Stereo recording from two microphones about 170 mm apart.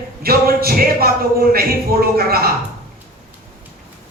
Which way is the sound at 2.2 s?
60° right (ahead or behind).